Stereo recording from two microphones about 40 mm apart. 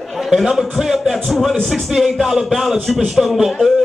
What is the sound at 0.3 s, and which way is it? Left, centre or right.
Speech, centre.